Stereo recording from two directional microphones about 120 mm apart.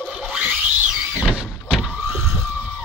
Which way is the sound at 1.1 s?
5° right (ahead or behind).